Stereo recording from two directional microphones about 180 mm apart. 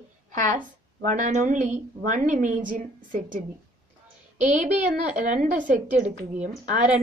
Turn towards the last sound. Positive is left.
turn(degrees=-45)  # may be behind; listen again after turning